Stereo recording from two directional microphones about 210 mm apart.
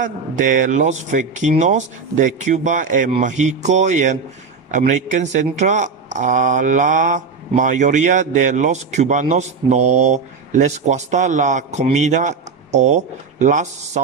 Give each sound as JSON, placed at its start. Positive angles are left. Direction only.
{"t": 0.0, "sound": "speech", "side_deg": -40}